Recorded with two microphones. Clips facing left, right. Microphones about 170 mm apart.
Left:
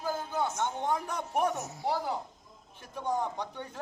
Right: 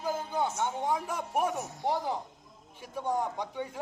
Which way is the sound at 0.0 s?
15° right (ahead or behind).